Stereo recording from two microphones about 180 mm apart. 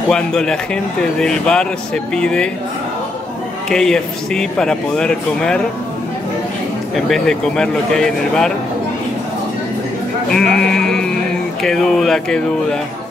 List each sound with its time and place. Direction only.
0.1 s a man's voice: 5° left (ahead or behind)
3.6 s a man's voice: 5° left (ahead or behind)
7.1 s a man's voice: 5° left (ahead or behind)
10.3 s a man's voice: 5° left (ahead or behind)